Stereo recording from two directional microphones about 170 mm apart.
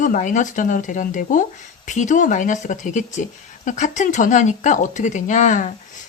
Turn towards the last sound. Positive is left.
turn(degrees=45)  # may be behind; listen again after turning